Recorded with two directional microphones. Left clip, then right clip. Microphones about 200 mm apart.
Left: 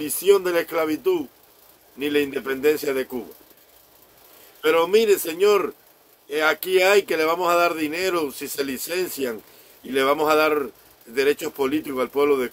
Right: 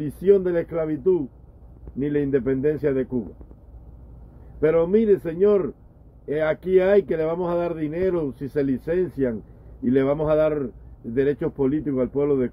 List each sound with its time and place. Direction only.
0.0 s speech: 10° left (ahead or behind)
4.6 s speech: 10° left (ahead or behind)